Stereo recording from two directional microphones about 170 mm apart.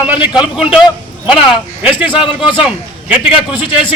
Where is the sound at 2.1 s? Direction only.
30° left (ahead or behind).